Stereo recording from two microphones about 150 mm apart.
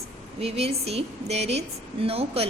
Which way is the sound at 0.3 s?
40° right (ahead or behind).